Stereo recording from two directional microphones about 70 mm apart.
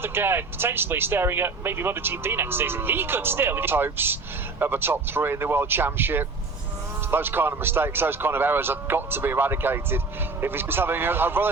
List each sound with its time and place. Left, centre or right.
0.0 s speech: right